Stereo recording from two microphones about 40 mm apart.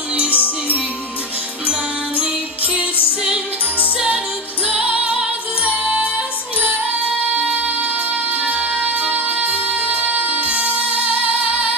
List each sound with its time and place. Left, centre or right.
0.3 s music: left
4.8 s music: right
5.9 s music: right
7.5 s music: right